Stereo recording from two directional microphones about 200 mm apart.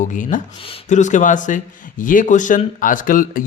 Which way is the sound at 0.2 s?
40° left (ahead or behind).